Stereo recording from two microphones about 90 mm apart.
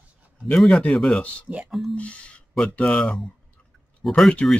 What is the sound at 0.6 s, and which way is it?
Speech, 5° left (ahead or behind).